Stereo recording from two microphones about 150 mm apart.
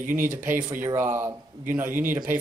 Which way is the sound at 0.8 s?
15° right (ahead or behind).